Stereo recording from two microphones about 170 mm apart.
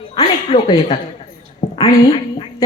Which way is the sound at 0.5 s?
35° left (ahead or behind).